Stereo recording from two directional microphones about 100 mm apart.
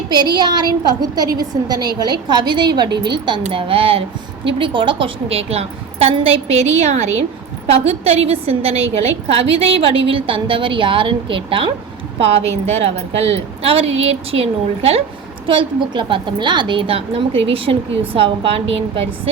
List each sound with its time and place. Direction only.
0.1 s a woman's voice: 45° right (ahead or behind); by 11.7 s 65° right (ahead or behind)
12.2 s a woman's voice: 90° right
15.4 s a woman's voice: 55° right (ahead or behind); by 19.3 s 70° right (ahead or behind)